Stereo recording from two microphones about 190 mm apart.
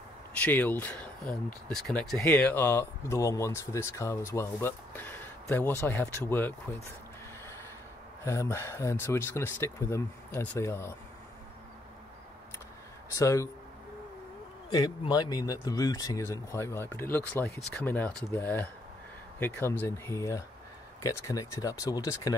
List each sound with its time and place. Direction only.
0.4 s speech: 10° left (ahead or behind)
8.3 s speech: 15° left (ahead or behind)
13.1 s speech: 15° left (ahead or behind)
14.7 s speech: 20° left (ahead or behind)